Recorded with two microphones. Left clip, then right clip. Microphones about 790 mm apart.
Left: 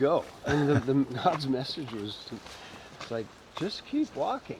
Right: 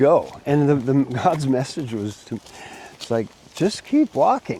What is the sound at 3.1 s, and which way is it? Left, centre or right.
Speech, right.